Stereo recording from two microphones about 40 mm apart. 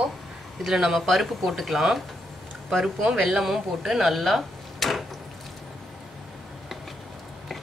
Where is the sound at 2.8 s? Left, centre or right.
Centre.